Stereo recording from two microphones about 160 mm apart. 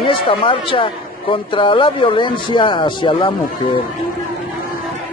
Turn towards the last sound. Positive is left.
turn(degrees=30)  # may be behind; listen again after turning